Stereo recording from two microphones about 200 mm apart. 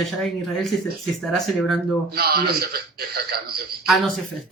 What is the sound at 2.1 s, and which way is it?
Speech, 50° right (ahead or behind).